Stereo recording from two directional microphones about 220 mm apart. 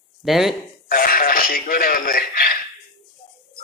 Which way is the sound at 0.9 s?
40° left (ahead or behind).